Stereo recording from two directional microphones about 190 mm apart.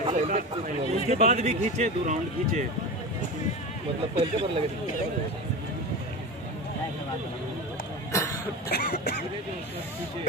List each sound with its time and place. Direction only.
0.0 s a man's voice: 35° right (ahead or behind)
4.2 s speech: 30° right (ahead or behind)
8.6 s throat clearing: 60° left (ahead or behind)